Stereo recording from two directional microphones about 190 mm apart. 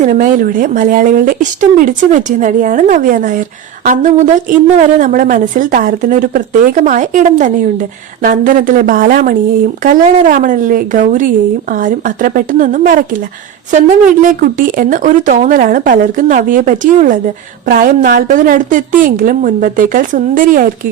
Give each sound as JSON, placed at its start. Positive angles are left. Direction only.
{"t": 0.0, "sound": "a woman's voice", "side_deg": -45}